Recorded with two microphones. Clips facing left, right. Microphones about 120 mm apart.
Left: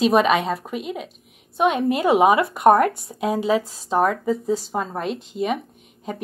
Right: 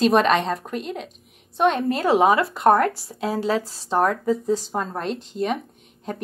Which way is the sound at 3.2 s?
5° left (ahead or behind).